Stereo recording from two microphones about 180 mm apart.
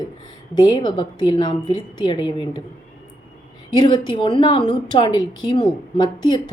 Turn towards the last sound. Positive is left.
turn(degrees=25)  # may be behind; listen again after turning